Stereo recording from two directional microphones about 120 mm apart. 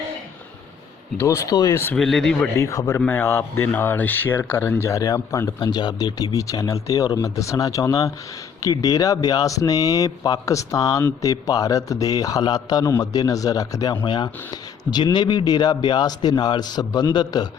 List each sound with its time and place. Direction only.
1.2 s speech: 25° left (ahead or behind)
2.0 s speech: 5° left (ahead or behind)
2.6 s speech: 25° left (ahead or behind)
14.0 s speech: 40° left (ahead or behind)